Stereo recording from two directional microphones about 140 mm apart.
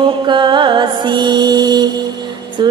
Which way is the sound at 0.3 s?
35° right (ahead or behind).